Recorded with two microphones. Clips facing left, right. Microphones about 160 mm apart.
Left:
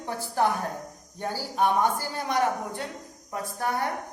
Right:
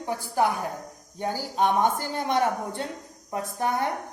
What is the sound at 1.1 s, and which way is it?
A woman's voice, 15° right (ahead or behind).